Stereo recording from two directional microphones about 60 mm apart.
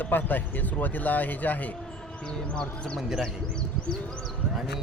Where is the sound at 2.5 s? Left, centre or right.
Centre.